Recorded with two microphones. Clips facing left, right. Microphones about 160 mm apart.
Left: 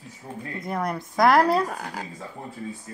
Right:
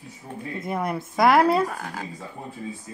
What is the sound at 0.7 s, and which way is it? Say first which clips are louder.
Speech: right 1 dB; 5° right (ahead or behind).